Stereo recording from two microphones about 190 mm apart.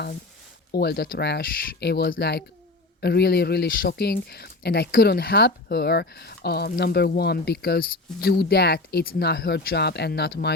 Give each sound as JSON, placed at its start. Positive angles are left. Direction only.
{"t": 0.7, "sound": "speech", "side_deg": 55}